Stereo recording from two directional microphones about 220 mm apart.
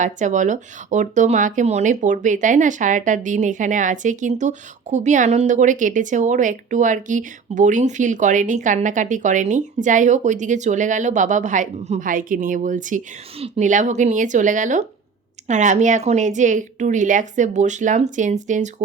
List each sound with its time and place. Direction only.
0.0 s speech: 35° right (ahead or behind)